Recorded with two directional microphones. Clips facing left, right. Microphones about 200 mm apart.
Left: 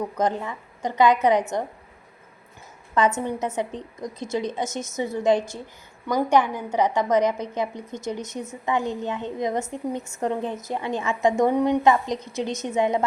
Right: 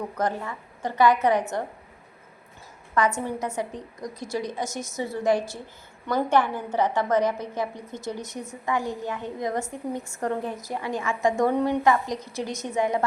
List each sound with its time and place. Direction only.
0.2 s a woman's voice: 20° left (ahead or behind)
3.2 s a woman's voice: 20° left (ahead or behind)